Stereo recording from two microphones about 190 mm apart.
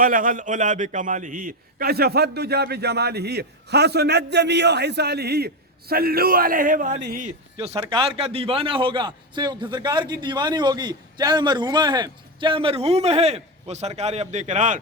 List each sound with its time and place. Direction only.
0.0 s a man's voice: 45° right (ahead or behind)
7.8 s a man's voice: 25° right (ahead or behind)